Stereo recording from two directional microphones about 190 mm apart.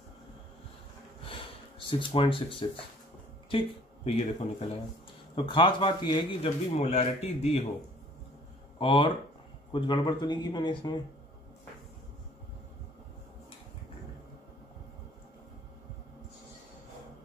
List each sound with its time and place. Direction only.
1.9 s a man's voice: 25° left (ahead or behind)
8.7 s a man's voice: 25° left (ahead or behind)